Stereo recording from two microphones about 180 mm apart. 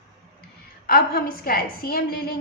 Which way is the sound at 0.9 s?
55° left (ahead or behind).